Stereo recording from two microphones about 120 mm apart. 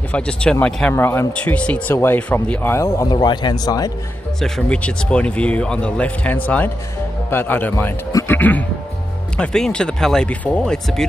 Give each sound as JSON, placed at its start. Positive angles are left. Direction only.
{"t": 0.1, "sound": "speech", "side_deg": 10}
{"t": 0.9, "sound": "speech", "side_deg": 20}
{"t": 2.7, "sound": "speech", "side_deg": 25}
{"t": 4.4, "sound": "speech", "side_deg": 5}
{"t": 8.1, "sound": "music", "side_deg": 25}
{"t": 8.4, "sound": "speech", "side_deg": 15}